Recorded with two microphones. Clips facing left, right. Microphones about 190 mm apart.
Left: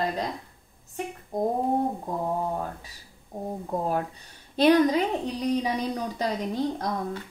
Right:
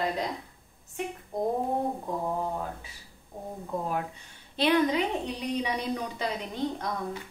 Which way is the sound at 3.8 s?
40° left (ahead or behind).